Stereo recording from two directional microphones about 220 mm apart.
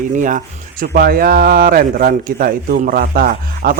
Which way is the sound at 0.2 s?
35° right (ahead or behind).